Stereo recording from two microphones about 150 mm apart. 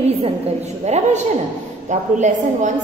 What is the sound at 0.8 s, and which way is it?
A woman's voice, 50° right (ahead or behind).